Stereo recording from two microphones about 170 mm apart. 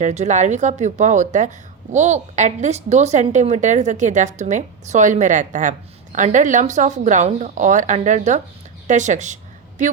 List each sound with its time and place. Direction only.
0.0 s speech: 45° right (ahead or behind)